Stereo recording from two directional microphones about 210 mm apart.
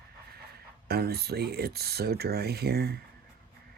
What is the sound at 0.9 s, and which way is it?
Speech, 50° right (ahead or behind).